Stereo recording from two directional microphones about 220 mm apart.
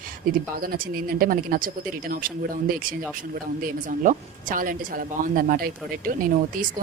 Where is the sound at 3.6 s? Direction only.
35° right (ahead or behind).